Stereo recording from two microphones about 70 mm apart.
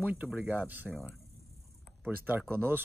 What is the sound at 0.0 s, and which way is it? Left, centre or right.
Speech, right.